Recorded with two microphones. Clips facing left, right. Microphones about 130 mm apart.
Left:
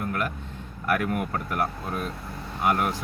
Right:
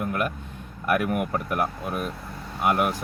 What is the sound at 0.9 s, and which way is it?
Speech, 15° right (ahead or behind).